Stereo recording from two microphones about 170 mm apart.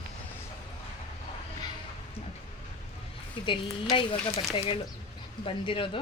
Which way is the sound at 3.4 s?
30° left (ahead or behind).